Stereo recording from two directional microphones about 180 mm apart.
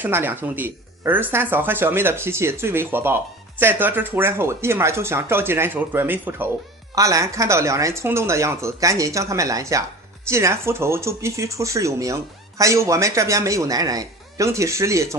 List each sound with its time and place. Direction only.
0.0 s speech: 10° right (ahead or behind)